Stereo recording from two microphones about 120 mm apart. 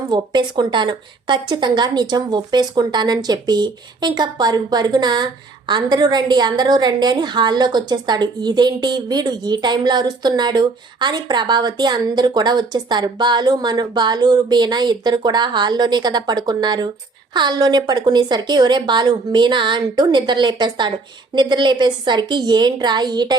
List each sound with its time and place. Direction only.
0.1 s a woman's voice: 35° right (ahead or behind)